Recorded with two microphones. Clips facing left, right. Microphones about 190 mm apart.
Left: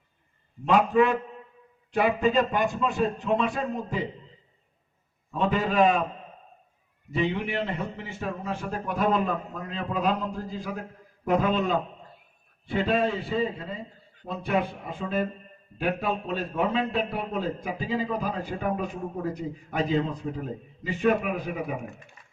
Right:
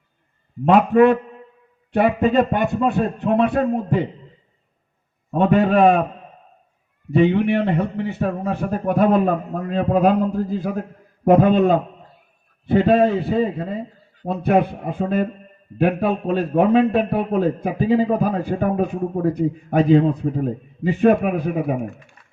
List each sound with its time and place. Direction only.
0.6 s a man's voice: 60° right (ahead or behind)
5.3 s a man's voice: 60° right (ahead or behind)
7.1 s a man's voice: 60° right (ahead or behind)